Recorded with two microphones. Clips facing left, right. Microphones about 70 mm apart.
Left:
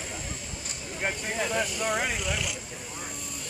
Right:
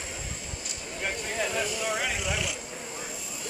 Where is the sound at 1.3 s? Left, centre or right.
Centre.